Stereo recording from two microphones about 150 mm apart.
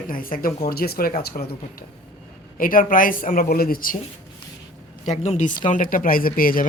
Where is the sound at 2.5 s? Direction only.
65° left (ahead or behind); by 3.9 s 85° left.